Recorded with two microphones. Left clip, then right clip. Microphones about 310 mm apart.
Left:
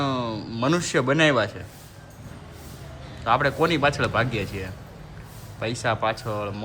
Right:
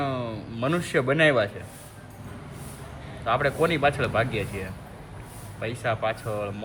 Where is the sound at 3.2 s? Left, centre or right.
Centre.